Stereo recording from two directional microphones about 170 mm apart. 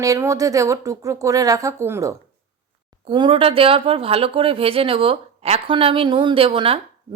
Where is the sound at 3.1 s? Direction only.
30° right (ahead or behind).